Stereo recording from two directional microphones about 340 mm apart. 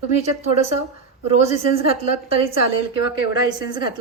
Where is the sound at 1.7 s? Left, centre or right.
Centre.